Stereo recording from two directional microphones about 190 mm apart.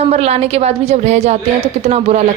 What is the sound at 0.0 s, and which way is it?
A woman's voice, 35° right (ahead or behind).